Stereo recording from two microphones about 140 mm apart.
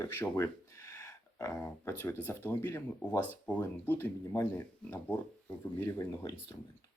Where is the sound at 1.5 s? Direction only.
15° left (ahead or behind).